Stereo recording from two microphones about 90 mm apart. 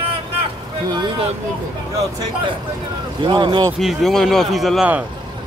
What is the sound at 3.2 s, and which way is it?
Speech, 60° right (ahead or behind).